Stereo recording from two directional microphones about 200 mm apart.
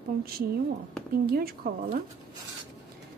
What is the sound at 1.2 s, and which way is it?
Speech, 50° right (ahead or behind).